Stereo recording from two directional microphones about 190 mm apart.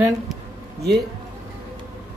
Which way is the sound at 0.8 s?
35° right (ahead or behind).